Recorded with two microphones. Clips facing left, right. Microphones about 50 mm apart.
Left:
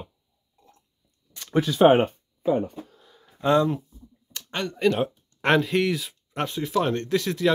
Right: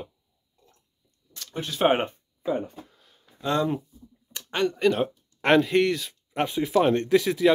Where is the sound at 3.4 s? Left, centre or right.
Left.